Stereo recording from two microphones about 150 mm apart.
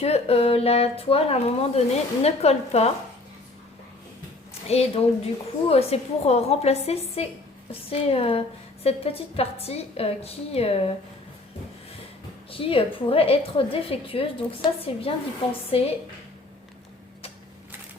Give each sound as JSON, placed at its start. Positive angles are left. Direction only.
{"t": 0.0, "sound": "speech", "side_deg": 45}
{"t": 4.7, "sound": "a woman's voice", "side_deg": 45}
{"t": 12.5, "sound": "a woman's voice", "side_deg": 35}